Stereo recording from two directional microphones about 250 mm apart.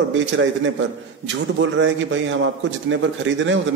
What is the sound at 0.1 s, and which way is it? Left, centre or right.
A man's voice, right.